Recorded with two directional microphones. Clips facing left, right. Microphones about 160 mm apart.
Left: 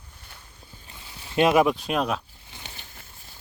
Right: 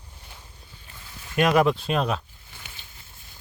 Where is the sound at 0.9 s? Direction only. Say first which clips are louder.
Left 2 dB; 25° left (ahead or behind).